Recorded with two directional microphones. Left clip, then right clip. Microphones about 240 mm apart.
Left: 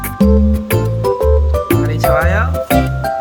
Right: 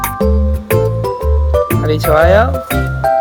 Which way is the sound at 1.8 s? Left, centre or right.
Right.